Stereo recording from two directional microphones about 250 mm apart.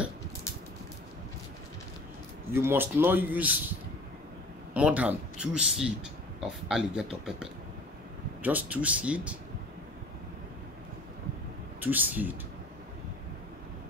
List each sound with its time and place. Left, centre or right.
2.5 s speech: centre
4.7 s speech: centre
11.8 s speech: centre